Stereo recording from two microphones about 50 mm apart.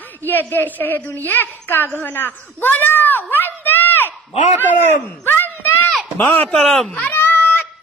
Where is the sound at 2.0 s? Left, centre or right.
Left.